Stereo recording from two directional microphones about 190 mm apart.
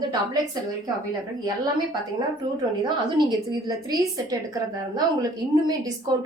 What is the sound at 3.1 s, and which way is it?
A woman's voice, 20° right (ahead or behind).